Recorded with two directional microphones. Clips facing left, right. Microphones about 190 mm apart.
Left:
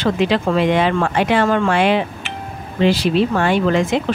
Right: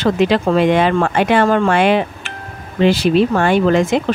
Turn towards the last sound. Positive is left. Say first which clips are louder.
# right 3 dB
turn(degrees=-45)  # may be behind; listen again after turning